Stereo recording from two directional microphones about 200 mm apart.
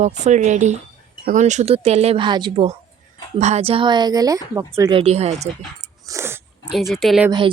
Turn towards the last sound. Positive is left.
turn(degrees=-25)  # may be behind; listen again after turning